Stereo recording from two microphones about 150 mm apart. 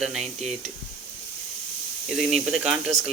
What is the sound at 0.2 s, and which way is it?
Speech, 50° right (ahead or behind).